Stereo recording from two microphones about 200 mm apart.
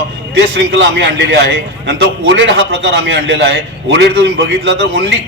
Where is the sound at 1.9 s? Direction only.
60° right (ahead or behind).